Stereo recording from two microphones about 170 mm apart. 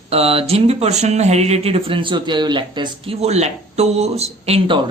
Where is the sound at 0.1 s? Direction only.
35° right (ahead or behind).